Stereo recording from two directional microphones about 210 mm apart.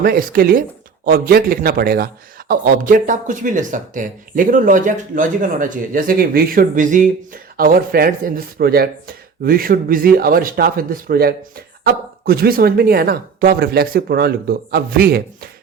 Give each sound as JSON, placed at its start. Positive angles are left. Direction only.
{"t": 0.0, "sound": "speech", "side_deg": -45}